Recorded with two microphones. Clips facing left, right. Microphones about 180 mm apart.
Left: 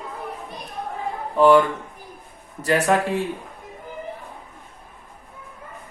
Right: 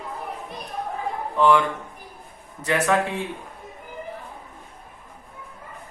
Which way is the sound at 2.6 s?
35° left (ahead or behind).